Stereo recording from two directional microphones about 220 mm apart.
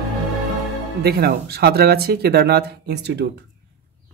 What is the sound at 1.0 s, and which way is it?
Speech, 45° right (ahead or behind).